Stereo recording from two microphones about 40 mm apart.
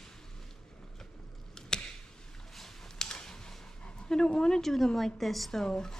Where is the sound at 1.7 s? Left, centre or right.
Centre.